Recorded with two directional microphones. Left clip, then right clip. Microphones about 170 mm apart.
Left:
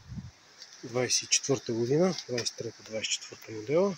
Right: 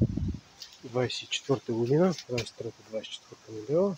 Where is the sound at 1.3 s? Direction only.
15° left (ahead or behind).